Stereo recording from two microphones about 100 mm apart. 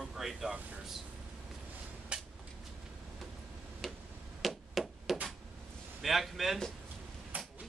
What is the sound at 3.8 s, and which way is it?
Tick-tock, 5° left (ahead or behind).